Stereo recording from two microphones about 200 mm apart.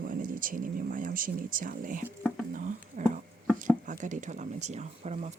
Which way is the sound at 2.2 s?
5° left (ahead or behind).